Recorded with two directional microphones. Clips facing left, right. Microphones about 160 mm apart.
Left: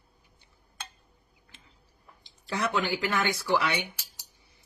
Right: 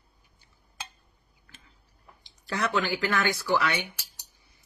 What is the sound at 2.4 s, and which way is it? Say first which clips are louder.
Speech: right 1 dB; 25° left (ahead or behind).